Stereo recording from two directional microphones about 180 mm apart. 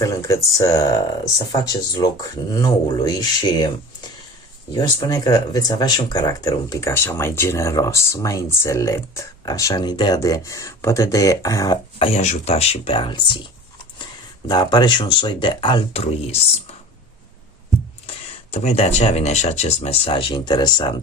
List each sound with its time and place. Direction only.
0.0 s speech: 15° left (ahead or behind)
4.7 s speech: 25° left (ahead or behind)
11.9 s speech: 35° left (ahead or behind)
14.4 s speech: 25° left (ahead or behind)
18.0 s speech: 35° left (ahead or behind)